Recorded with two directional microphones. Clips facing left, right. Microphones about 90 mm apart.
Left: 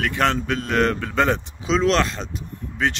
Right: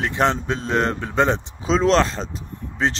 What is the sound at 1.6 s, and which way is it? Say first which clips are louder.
Speech: right 2 dB; 35° right (ahead or behind).